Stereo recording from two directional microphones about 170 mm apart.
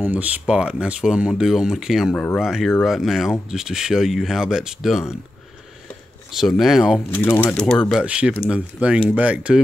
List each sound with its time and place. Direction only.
0.0 s speech: 10° right (ahead or behind)
6.3 s speech: centre (ahead or behind)
7.2 s speech: 10° left (ahead or behind)
8.0 s speech: 5° right (ahead or behind)